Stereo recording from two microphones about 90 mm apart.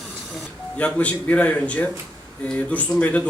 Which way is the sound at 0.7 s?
15° left (ahead or behind).